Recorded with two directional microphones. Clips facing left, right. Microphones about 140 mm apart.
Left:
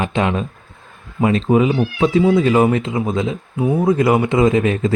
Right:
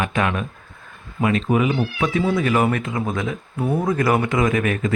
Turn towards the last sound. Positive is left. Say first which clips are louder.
# left 5 dB
turn(degrees=25)  # may be behind; listen again after turning